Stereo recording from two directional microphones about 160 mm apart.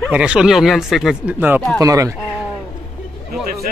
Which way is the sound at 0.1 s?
5° right (ahead or behind).